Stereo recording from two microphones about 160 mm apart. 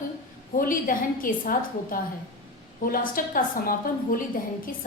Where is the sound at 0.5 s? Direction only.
60° left (ahead or behind).